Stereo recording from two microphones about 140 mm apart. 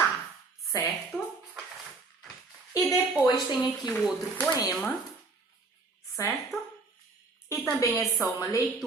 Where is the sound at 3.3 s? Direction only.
30° left (ahead or behind).